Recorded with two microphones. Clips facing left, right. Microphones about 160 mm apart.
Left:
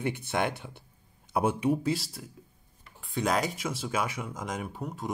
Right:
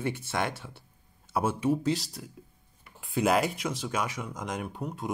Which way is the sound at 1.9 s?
5° left (ahead or behind).